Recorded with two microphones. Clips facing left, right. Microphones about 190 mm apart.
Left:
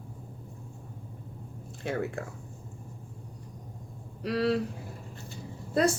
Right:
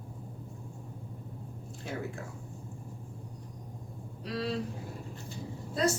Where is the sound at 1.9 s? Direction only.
65° left (ahead or behind).